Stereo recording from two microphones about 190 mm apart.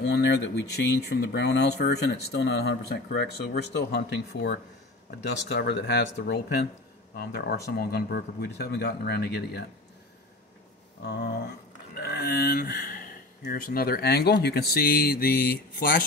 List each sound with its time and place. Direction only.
0.0 s speech: 60° left (ahead or behind)
11.9 s speech: 55° left (ahead or behind)